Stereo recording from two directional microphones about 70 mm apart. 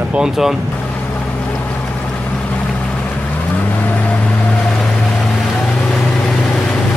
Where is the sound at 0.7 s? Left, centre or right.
Left.